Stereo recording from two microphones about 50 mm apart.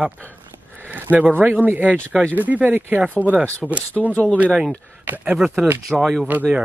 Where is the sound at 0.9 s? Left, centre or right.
Right.